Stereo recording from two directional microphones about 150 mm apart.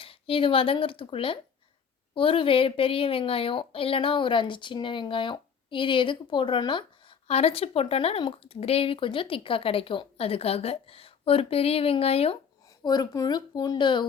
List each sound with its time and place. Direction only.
0.0 s speech: 40° left (ahead or behind)
12.8 s speech: 25° left (ahead or behind)